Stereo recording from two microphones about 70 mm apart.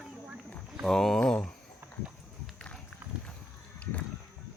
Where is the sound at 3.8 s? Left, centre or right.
Centre.